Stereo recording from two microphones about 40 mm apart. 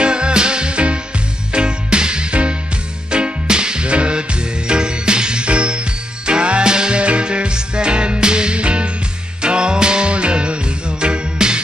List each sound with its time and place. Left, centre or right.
0.0 s music: right